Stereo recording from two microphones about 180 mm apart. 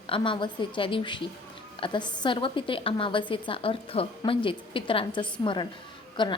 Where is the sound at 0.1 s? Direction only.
25° left (ahead or behind).